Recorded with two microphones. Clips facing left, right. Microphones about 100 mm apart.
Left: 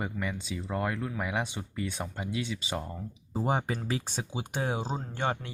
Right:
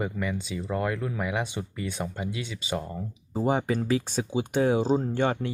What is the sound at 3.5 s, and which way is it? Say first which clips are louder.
Speech: right 6 dB; 30° left (ahead or behind).